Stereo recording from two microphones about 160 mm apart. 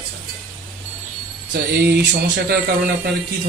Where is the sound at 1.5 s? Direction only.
90° right.